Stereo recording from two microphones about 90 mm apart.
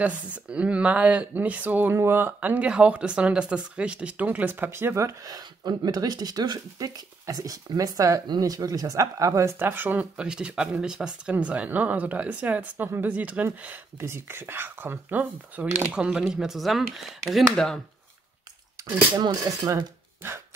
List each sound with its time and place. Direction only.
0.0 s speech: 15° right (ahead or behind)
13.9 s speech: 30° right (ahead or behind); by 17.7 s 5° left (ahead or behind)
19.1 s speech: 55° right (ahead or behind)